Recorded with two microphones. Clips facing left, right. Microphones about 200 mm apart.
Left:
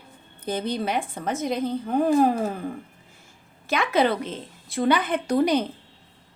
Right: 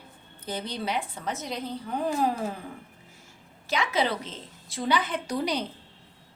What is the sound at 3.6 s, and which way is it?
A woman's voice, 55° left (ahead or behind).